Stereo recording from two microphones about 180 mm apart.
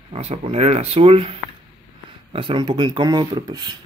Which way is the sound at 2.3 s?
30° right (ahead or behind).